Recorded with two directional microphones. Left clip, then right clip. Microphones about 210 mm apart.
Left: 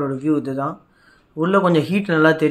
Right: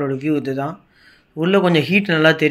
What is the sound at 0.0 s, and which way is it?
Speech, centre (ahead or behind).